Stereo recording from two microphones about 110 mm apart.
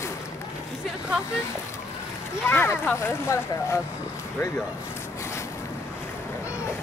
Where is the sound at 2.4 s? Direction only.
20° left (ahead or behind).